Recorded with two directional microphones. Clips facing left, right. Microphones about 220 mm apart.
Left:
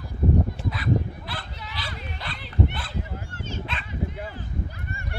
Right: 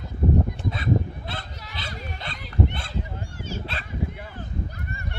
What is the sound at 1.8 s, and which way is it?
Dog, 25° right (ahead or behind).